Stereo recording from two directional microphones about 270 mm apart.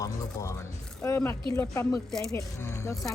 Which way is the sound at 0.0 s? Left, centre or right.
Centre.